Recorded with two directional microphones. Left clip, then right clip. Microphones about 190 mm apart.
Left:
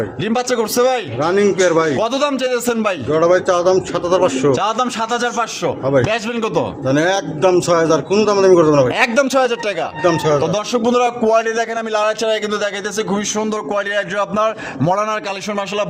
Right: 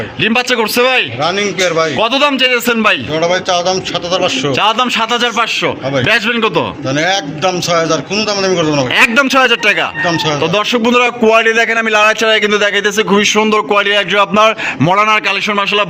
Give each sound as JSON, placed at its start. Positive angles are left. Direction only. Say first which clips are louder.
{"t": 0.2, "sound": "a man's voice", "louder": "right 7 dB", "side_deg": 0}
{"t": 1.3, "sound": "a man's voice", "louder": "even", "side_deg": 25}
{"t": 2.0, "sound": "a man's voice", "louder": "right 6 dB", "side_deg": 0}
{"t": 3.2, "sound": "a man's voice", "louder": "right 1 dB", "side_deg": 45}
{"t": 4.5, "sound": "a man's voice", "louder": "right 6 dB", "side_deg": -5}
{"t": 6.9, "sound": "a man's voice", "louder": "right 2 dB", "side_deg": 40}
{"t": 8.9, "sound": "a man's voice", "louder": "right 5 dB", "side_deg": 0}
{"t": 10.0, "sound": "speech", "louder": "right 1 dB", "side_deg": 40}
{"t": 10.4, "sound": "a man's voice", "louder": "right 5 dB", "side_deg": -10}